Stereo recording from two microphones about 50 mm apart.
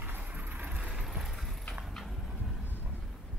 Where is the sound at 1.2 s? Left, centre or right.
Centre.